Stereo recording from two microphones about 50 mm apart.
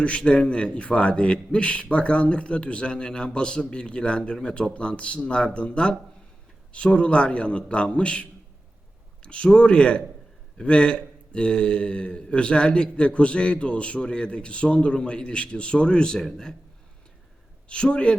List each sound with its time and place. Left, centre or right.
0.2 s a man's voice: centre
17.7 s a man's voice: centre